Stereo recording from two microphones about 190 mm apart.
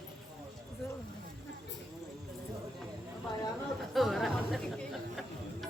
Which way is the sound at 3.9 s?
Centre (ahead or behind).